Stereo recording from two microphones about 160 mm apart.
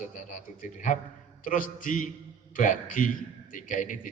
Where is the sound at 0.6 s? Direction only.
55° left (ahead or behind).